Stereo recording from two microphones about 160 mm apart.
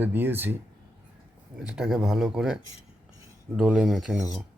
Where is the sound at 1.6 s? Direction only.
5° right (ahead or behind).